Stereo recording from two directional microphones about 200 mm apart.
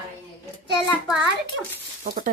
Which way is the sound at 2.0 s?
45° right (ahead or behind).